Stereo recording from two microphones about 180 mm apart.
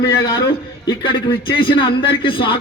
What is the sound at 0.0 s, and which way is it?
A man's voice, 20° left (ahead or behind).